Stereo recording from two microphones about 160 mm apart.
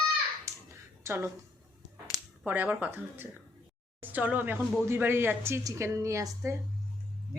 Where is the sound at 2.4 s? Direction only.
10° right (ahead or behind).